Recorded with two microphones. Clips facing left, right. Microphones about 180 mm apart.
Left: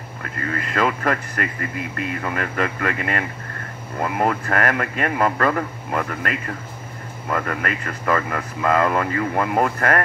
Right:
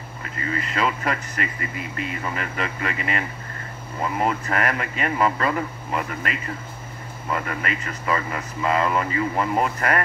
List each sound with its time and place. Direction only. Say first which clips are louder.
0.2 s speech: left 1 dB; 55° left (ahead or behind)